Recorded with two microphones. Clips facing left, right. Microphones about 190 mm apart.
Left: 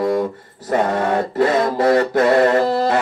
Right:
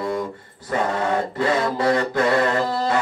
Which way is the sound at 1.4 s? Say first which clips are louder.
Left 5 dB; 50° left (ahead or behind).